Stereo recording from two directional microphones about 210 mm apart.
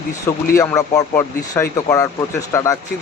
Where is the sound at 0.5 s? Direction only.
15° left (ahead or behind).